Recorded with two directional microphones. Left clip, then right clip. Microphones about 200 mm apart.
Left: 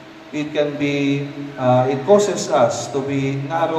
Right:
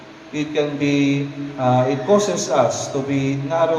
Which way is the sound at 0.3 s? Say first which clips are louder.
Left 1 dB; 60° left (ahead or behind).